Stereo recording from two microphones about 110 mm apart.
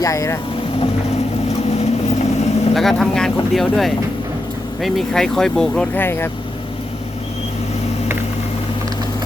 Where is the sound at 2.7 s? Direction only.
Centre (ahead or behind).